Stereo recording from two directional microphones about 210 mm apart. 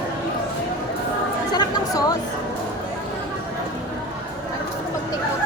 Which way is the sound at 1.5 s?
20° left (ahead or behind).